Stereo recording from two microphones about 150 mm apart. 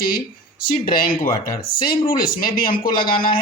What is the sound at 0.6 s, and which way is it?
Speech, 70° left (ahead or behind).